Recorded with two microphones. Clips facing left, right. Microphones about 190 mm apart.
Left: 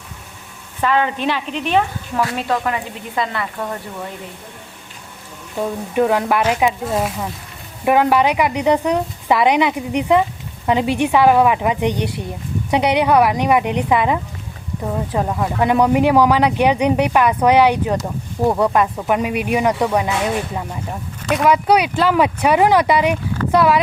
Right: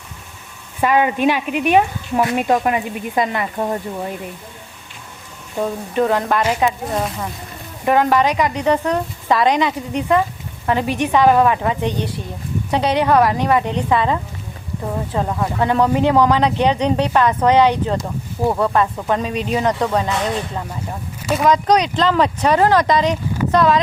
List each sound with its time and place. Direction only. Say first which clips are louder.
0.8 s speech: right 3 dB; 15° right (ahead or behind)
5.9 s speech: left 2 dB; 10° left (ahead or behind)
21.2 s speech: even; centre (ahead or behind)